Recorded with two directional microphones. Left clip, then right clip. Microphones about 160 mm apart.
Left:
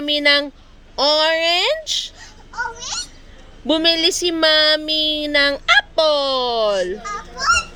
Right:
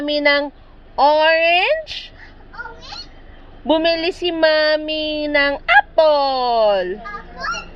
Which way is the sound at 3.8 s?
25° left (ahead or behind).